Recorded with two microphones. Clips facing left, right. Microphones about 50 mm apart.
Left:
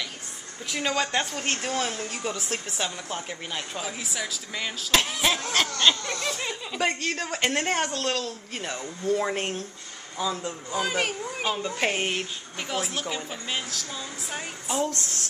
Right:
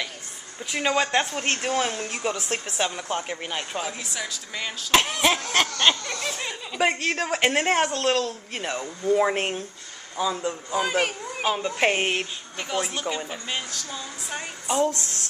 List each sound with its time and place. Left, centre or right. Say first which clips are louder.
0.7 s speech: right 4 dB; centre
1.7 s speech: right 3 dB; centre
2.0 s speech: right 3 dB; right
4.0 s speech: even; centre
5.5 s speech: right 1 dB; right
6.0 s speech: even; centre
6.9 s speech: right 4 dB; right
9.3 s speech: right 3 dB; right
10.1 s speech: right 3 dB; centre
11.5 s speech: right 5 dB; centre
12.5 s speech: right 2 dB; centre